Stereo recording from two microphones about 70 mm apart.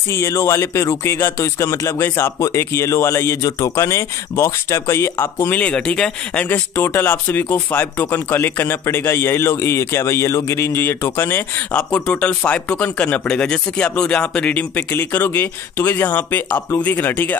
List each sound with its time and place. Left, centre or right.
0.1 s a man's voice: left
5.5 s speech: centre
6.5 s a man's voice: left
11.7 s speech: centre
14.9 s speech: left